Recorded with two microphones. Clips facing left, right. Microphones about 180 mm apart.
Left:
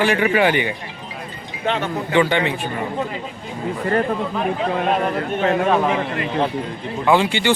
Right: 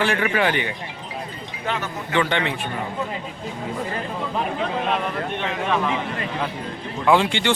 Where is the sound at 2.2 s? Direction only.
5° left (ahead or behind).